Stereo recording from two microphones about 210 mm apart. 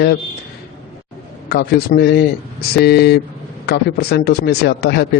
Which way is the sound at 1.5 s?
50° left (ahead or behind).